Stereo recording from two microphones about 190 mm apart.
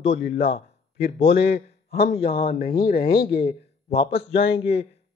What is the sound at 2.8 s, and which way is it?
Speech, 55° left (ahead or behind).